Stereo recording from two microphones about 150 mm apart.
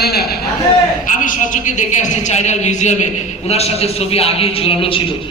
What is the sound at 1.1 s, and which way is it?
A man's voice, 60° left (ahead or behind).